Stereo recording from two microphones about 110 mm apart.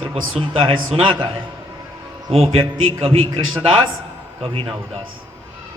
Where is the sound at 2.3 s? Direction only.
60° right (ahead or behind).